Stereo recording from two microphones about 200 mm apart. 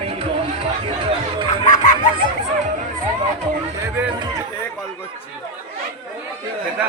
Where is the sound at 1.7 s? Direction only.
40° left (ahead or behind).